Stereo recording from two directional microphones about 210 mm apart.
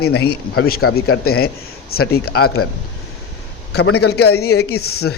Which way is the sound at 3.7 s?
50° left (ahead or behind).